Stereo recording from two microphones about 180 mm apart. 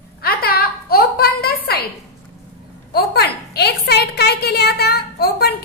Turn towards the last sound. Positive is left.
turn(degrees=60)  # may be behind; listen again after turning